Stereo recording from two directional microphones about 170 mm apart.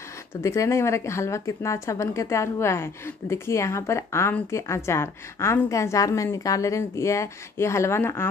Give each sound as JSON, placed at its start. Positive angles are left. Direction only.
{"t": 0.3, "sound": "speech", "side_deg": 15}